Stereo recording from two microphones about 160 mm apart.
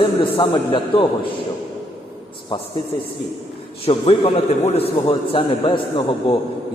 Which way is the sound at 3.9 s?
40° left (ahead or behind).